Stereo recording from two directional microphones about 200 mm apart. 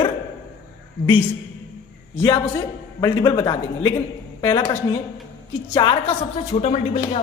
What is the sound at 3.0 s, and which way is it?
Speech, 20° left (ahead or behind).